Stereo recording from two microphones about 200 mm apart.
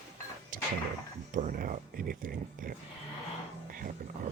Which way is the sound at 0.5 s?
45° right (ahead or behind).